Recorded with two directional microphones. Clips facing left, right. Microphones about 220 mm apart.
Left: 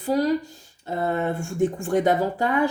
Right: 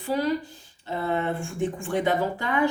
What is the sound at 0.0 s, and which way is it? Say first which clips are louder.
Speech: left 4 dB; 40° left (ahead or behind).